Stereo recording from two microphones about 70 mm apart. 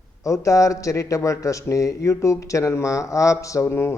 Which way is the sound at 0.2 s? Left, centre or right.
Left.